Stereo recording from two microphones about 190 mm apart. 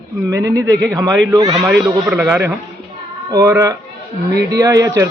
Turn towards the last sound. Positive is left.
turn(degrees=-15)  # may be behind; listen again after turning